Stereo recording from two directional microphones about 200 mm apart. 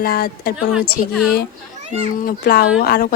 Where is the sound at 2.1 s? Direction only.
45° left (ahead or behind).